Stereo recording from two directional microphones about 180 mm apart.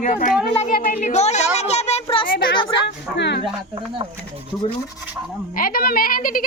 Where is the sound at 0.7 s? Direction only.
50° left (ahead or behind); by 2.2 s 35° left (ahead or behind).